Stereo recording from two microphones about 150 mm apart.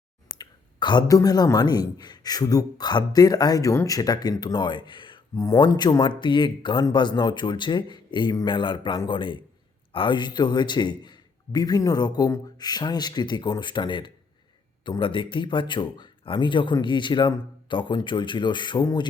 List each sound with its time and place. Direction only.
0.3 s a man's voice: 30° left (ahead or behind)